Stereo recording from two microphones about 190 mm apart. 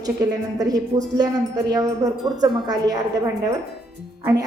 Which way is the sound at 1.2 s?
20° right (ahead or behind).